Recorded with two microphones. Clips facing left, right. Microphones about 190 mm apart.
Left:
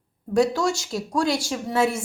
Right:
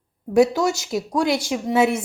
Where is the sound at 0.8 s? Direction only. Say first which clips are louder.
Right 3 dB; 20° right (ahead or behind).